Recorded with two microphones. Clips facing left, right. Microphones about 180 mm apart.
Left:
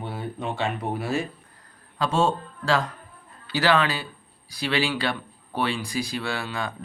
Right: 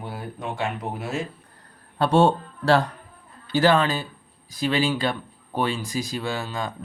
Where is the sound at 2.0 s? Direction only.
65° right (ahead or behind).